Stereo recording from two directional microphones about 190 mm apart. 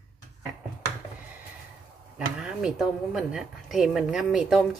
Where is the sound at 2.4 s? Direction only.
5° right (ahead or behind).